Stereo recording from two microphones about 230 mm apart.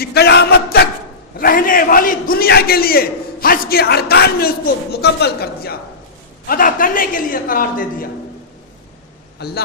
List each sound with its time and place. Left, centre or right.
0.0 s a sound: left
1.4 s a man's voice: left
9.4 s a man's voice: left